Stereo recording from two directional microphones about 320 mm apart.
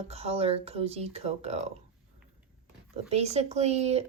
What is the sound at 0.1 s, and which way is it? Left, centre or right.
Speech, centre.